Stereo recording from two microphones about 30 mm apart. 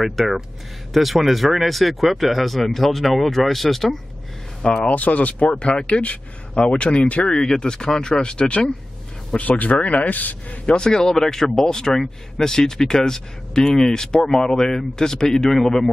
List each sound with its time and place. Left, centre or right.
0.1 s speech: centre
4.6 s speech: left
4.9 s a man's voice: left
5.6 s speech: left
5.9 s speech: left
6.5 s speech: left
7.3 s speech: left
9.4 s a man's voice: left
10.7 s speech: left